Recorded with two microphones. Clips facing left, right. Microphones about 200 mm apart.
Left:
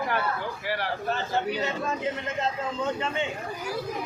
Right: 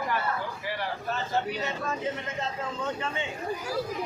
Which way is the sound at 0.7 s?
75° left (ahead or behind).